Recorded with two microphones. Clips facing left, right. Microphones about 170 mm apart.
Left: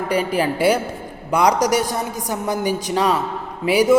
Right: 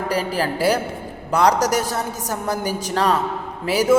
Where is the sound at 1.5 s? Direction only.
15° left (ahead or behind).